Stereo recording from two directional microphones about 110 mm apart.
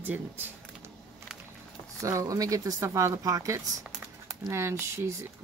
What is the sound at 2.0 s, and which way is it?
Speech, 30° right (ahead or behind).